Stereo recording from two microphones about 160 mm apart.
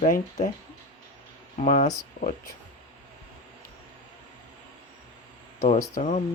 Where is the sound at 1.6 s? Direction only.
45° left (ahead or behind).